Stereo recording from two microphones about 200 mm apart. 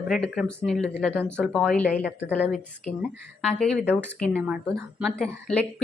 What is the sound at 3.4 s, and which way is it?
A woman's voice, 5° left (ahead or behind).